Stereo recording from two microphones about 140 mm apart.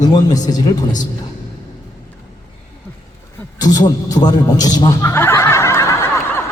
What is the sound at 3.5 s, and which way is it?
Chuckle, 30° left (ahead or behind).